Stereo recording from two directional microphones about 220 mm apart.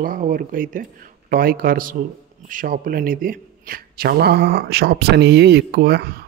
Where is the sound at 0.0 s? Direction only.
40° right (ahead or behind).